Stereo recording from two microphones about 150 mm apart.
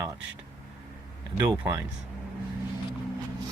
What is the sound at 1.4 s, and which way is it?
Speech, 20° right (ahead or behind).